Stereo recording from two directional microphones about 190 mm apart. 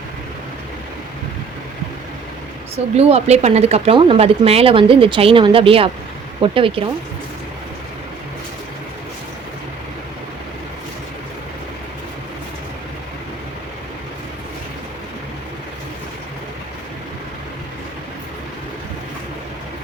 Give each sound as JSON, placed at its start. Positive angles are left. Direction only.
{"t": 2.7, "sound": "speech", "side_deg": -35}